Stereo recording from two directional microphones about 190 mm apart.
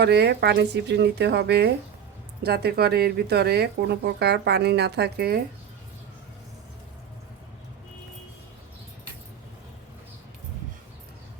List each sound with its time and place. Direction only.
0.0 s speech: 60° right (ahead or behind)